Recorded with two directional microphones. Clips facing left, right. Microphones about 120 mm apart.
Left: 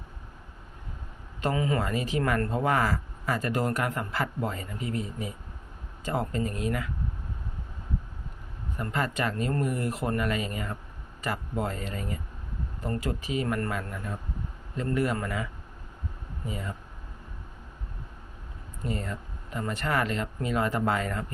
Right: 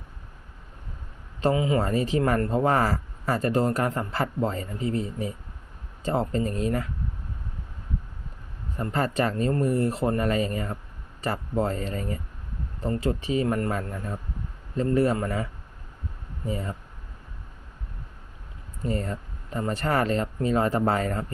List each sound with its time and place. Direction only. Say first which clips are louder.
1.5 s speech: right 1 dB; 20° right (ahead or behind)
1.8 s a man's voice: right 4 dB; 35° right (ahead or behind)
8.8 s a man's voice: right 4 dB; 35° right (ahead or behind)
16.5 s a man's voice: right 5 dB; 35° right (ahead or behind)
18.8 s a man's voice: right 4 dB; 40° right (ahead or behind)